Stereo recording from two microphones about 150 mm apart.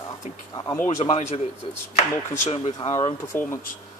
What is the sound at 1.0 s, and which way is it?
Speech, 50° left (ahead or behind).